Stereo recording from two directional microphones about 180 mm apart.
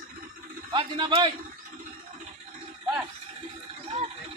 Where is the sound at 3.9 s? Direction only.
35° right (ahead or behind).